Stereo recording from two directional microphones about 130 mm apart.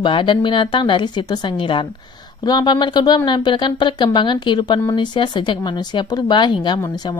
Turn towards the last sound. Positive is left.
turn(degrees=35)  # may be behind; listen again after turning